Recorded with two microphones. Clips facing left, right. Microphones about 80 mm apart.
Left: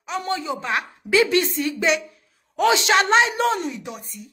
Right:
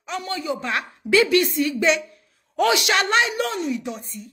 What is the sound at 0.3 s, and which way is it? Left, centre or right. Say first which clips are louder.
Speech: left 1 dB; left.